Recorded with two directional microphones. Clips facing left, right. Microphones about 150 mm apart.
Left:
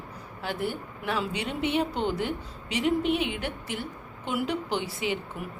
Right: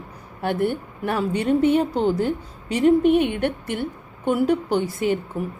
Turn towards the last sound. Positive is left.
turn(degrees=-50)  # may be behind; listen again after turning